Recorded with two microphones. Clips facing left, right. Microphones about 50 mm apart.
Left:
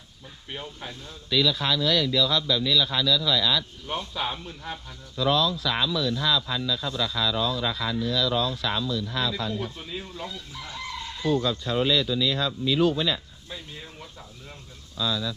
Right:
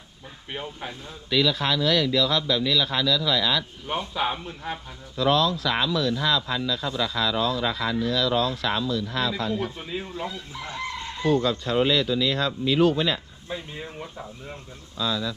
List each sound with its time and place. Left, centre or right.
0.5 s speech: right
1.3 s a man's voice: right
3.6 s speech: right
5.1 s speech: right
5.6 s speech: right
6.3 s speech: right
6.7 s a man's voice: right
7.2 s a man's voice: right
9.5 s speech: right
11.3 s a man's voice: right
13.5 s speech: right